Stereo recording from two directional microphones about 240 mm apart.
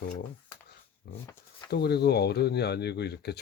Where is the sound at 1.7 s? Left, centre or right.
Left.